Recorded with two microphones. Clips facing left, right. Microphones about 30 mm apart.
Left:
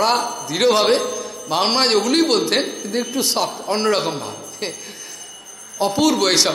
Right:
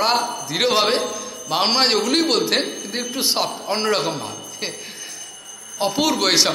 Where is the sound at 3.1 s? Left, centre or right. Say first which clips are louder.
Right 1 dB; centre.